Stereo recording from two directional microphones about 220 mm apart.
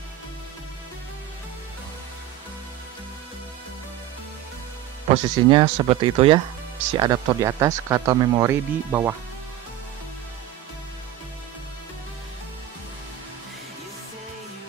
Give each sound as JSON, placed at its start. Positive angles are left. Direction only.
{"t": 5.1, "sound": "speech", "side_deg": -25}